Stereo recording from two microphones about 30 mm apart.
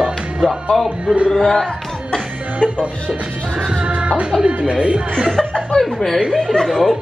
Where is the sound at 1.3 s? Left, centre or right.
Left.